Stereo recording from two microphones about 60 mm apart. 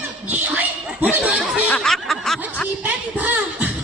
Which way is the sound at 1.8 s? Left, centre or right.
Centre.